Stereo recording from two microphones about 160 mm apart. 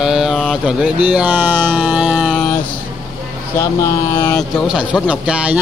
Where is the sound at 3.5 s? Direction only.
15° left (ahead or behind).